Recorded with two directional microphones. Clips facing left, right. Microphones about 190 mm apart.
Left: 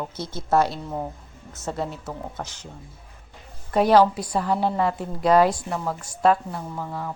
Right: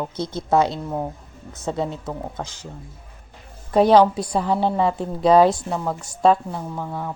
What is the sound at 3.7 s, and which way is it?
A woman's voice, 20° right (ahead or behind).